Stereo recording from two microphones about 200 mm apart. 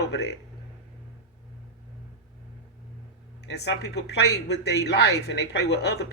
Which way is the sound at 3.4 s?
55° left (ahead or behind).